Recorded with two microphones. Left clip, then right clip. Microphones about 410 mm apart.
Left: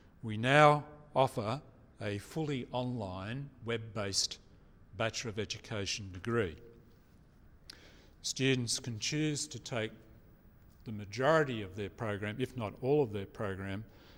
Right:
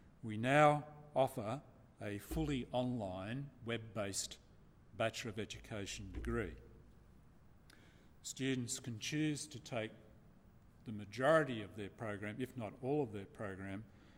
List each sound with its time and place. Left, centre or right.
0.3 s a man's voice: left
7.7 s a sound: left
8.4 s a man's voice: left